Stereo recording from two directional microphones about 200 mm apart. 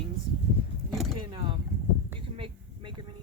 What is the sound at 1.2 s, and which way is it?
A woman's voice, 25° right (ahead or behind).